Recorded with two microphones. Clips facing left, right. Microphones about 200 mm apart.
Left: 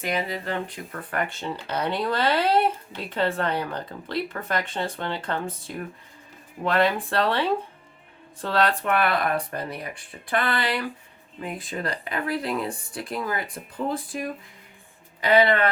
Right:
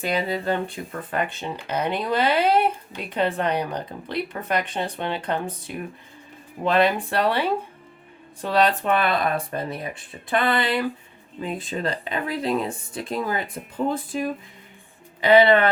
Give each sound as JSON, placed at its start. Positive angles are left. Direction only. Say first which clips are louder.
{"t": 0.0, "sound": "speech", "louder": "right 4 dB", "side_deg": -30}
{"t": 1.1, "sound": "speech", "louder": "right 1 dB", "side_deg": -20}